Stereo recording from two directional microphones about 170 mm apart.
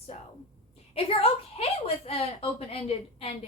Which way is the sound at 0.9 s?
35° left (ahead or behind).